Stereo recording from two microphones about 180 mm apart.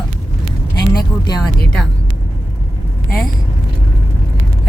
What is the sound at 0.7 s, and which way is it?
Speech, 20° left (ahead or behind).